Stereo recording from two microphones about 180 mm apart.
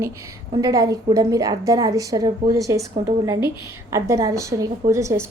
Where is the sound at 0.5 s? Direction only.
20° right (ahead or behind).